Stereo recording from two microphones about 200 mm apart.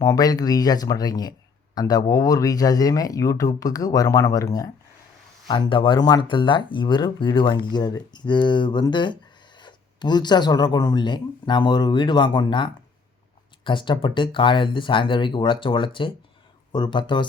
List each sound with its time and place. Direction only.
0.0 s speech: 20° left (ahead or behind)